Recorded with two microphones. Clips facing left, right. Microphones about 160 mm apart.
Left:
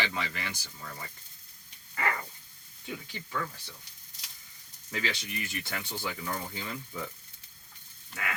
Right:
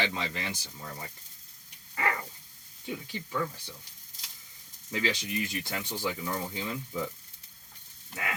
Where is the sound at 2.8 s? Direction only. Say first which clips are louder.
Right 3 dB; 20° right (ahead or behind).